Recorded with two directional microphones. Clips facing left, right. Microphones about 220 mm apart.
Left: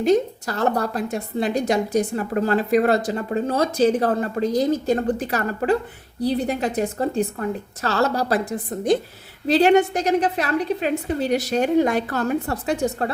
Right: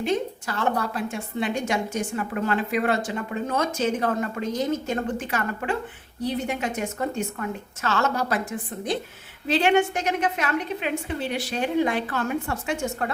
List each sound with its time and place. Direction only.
0.0 s a woman's voice: 40° left (ahead or behind)